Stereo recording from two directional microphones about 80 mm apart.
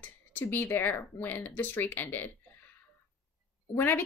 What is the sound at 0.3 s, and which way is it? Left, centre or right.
A woman's voice, left.